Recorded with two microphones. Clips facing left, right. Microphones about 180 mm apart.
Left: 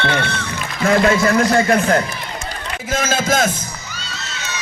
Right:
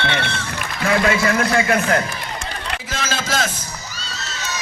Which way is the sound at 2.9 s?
50° left (ahead or behind).